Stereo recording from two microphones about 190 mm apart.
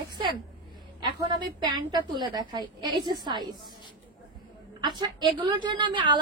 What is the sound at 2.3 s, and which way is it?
A woman's voice, 20° right (ahead or behind).